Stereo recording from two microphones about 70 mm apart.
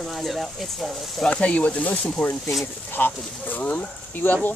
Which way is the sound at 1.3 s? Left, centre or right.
Centre.